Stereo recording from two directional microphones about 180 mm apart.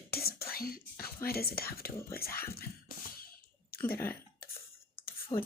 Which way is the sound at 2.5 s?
55° left (ahead or behind).